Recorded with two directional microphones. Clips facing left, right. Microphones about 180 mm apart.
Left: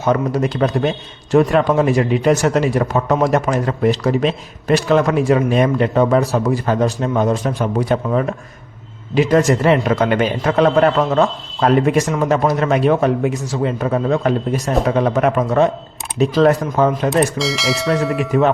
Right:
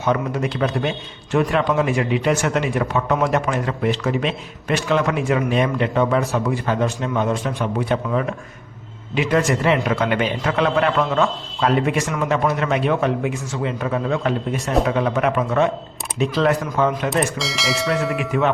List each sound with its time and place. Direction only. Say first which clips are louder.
0.0 s a man's voice: left 4 dB; 40° left (ahead or behind)
17.3 s speech: left 4 dB; centre (ahead or behind)
18.2 s a man's voice: left 6 dB; 40° left (ahead or behind)